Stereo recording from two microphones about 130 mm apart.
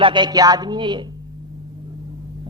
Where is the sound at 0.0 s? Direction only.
35° right (ahead or behind).